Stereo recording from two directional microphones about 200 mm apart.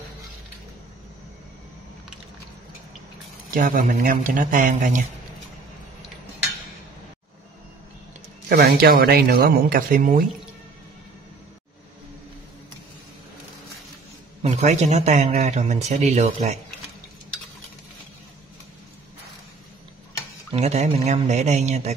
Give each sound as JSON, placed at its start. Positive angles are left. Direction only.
{"t": 3.5, "sound": "speech", "side_deg": -40}
{"t": 8.5, "sound": "speech", "side_deg": -50}
{"t": 14.4, "sound": "speech", "side_deg": -35}
{"t": 20.5, "sound": "speech", "side_deg": -30}